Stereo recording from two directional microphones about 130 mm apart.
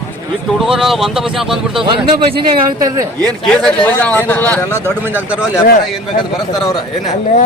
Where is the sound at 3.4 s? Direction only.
10° left (ahead or behind).